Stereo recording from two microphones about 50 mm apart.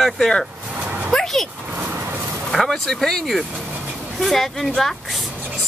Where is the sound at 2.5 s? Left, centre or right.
Centre.